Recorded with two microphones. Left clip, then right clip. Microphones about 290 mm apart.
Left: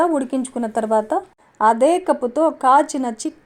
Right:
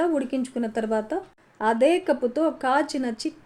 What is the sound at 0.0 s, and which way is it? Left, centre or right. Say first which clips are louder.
Speech: left 6 dB; left.